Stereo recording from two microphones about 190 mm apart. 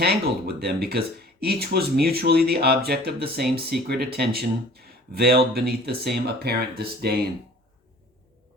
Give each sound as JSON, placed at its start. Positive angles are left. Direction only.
{"t": 0.0, "sound": "speech", "side_deg": -55}